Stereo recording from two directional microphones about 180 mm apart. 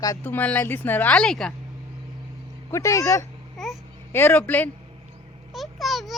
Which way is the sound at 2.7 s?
15° left (ahead or behind).